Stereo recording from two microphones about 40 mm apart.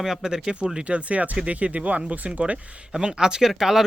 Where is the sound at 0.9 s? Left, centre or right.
Right.